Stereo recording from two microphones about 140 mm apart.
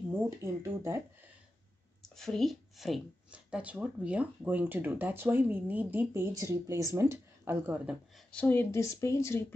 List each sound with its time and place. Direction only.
0.4 s speech: 20° right (ahead or behind)
2.1 s speech: 5° left (ahead or behind)
8.3 s speech: 10° left (ahead or behind)